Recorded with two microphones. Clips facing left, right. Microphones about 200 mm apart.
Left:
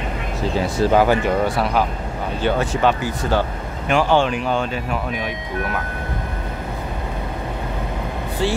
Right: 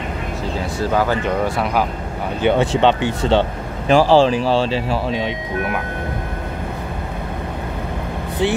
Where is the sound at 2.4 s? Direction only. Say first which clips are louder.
Right 4 dB; 25° right (ahead or behind).